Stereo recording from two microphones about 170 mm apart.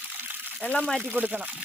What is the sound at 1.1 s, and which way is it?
Speech, 10° right (ahead or behind).